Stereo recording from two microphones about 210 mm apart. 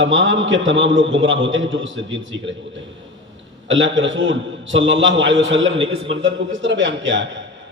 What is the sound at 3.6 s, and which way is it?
A man's voice, 60° right (ahead or behind).